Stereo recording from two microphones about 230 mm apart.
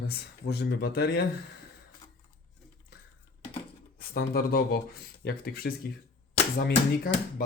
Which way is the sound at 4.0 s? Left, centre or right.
Left.